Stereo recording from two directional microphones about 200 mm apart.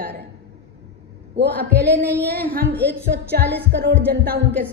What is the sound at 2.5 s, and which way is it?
A woman's voice, 55° right (ahead or behind).